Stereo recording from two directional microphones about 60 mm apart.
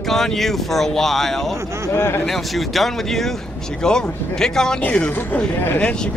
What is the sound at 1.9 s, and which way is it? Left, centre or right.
Speech, left.